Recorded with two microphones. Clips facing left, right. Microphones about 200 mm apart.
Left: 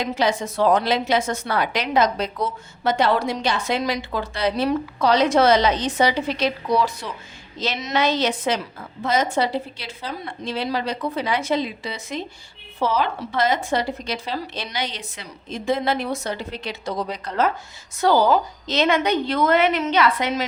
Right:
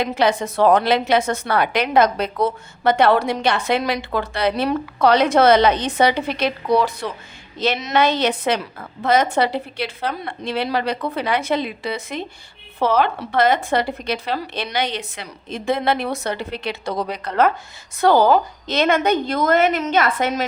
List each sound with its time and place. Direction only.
0.0 s a woman's voice: 60° right (ahead or behind)